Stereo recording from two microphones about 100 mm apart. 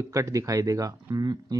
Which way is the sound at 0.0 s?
30° right (ahead or behind).